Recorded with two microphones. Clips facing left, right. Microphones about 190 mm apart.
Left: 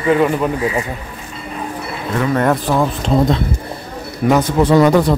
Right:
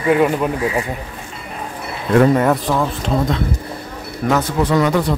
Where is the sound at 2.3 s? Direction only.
Centre (ahead or behind).